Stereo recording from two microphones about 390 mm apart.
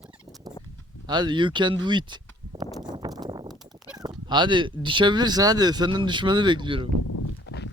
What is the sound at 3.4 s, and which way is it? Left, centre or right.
Speech, centre.